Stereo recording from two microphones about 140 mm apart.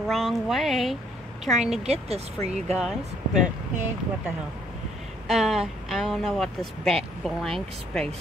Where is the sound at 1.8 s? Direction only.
50° right (ahead or behind).